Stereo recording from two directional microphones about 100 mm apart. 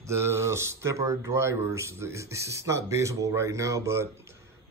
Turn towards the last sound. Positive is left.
turn(degrees=-30)  # may be behind; listen again after turning